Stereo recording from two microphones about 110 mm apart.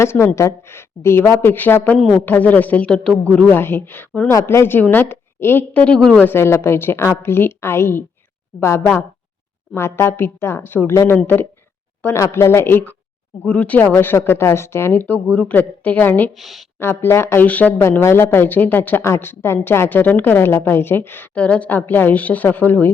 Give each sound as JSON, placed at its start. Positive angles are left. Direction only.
{"t": 0.0, "sound": "speech", "side_deg": 25}
{"t": 3.6, "sound": "speech", "side_deg": 20}
{"t": 16.4, "sound": "speech", "side_deg": 0}
{"t": 16.8, "sound": "speech", "side_deg": 20}